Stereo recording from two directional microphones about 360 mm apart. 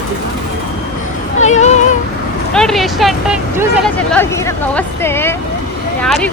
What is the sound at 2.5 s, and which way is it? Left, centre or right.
Vehicle, centre.